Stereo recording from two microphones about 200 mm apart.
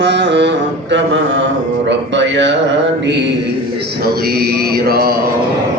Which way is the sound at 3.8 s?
50° right (ahead or behind).